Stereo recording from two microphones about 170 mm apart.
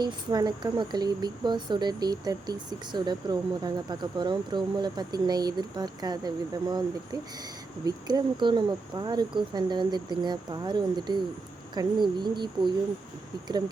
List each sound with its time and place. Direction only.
0.0 s speech: 25° right (ahead or behind)